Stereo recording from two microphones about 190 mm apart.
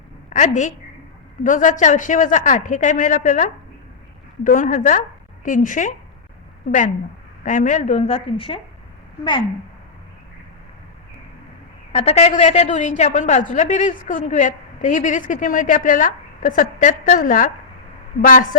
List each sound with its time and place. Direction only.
0.3 s a woman's voice: 40° left (ahead or behind)
11.9 s a woman's voice: 35° left (ahead or behind)